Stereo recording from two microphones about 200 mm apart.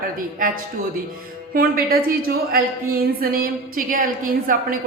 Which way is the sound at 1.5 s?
45° right (ahead or behind).